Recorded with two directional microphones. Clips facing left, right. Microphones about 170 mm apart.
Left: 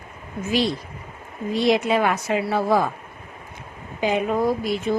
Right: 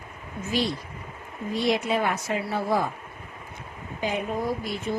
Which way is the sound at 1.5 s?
90° left.